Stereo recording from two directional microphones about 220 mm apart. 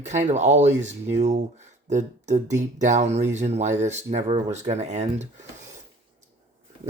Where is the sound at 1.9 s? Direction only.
30° right (ahead or behind).